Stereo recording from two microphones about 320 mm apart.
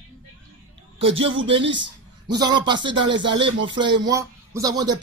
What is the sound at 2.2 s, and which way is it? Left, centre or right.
Speech, centre.